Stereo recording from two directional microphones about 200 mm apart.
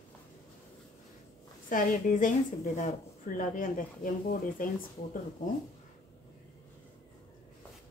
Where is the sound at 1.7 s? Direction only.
40° left (ahead or behind).